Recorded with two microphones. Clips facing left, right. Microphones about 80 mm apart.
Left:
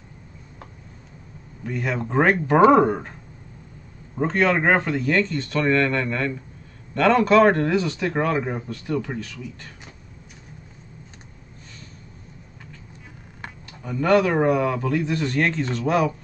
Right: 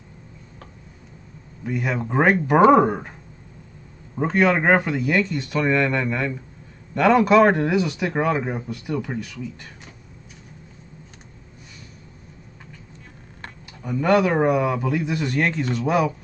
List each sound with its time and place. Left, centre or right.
1.6 s speech: centre
13.8 s speech: centre